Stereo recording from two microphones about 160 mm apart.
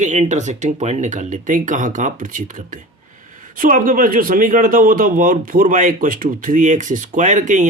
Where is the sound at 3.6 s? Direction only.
60° right (ahead or behind).